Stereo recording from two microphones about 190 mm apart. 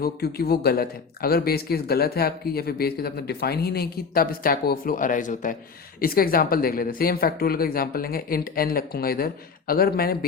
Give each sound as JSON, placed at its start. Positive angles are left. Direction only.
{"t": 0.0, "sound": "speech", "side_deg": 55}